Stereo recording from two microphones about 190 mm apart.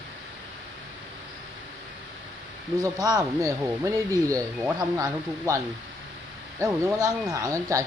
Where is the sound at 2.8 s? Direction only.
20° right (ahead or behind).